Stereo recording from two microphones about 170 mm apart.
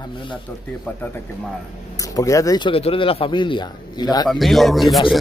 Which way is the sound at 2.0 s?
20° left (ahead or behind).